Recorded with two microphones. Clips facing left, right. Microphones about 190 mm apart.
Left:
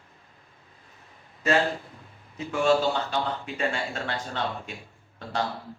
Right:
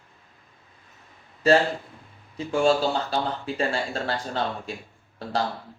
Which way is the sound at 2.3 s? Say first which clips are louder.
Right 1 dB; 30° right (ahead or behind).